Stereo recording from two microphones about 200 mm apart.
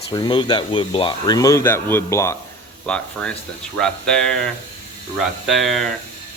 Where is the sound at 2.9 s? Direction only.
5° left (ahead or behind).